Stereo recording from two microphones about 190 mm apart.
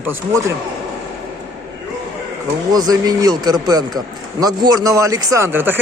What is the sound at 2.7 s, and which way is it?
A man's voice, 20° right (ahead or behind).